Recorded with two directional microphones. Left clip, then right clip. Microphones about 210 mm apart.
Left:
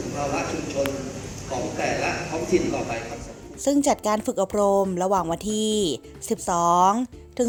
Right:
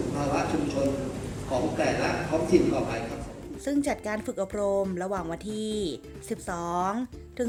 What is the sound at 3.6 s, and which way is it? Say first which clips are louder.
Speech: left 8 dB; 30° left (ahead or behind).